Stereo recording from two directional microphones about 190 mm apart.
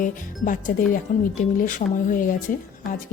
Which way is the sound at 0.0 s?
45° left (ahead or behind).